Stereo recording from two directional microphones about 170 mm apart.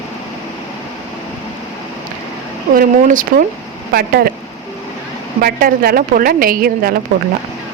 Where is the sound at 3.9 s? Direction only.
65° right (ahead or behind).